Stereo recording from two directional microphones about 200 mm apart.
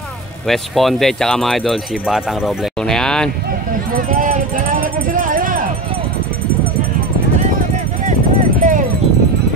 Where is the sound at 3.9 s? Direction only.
45° right (ahead or behind).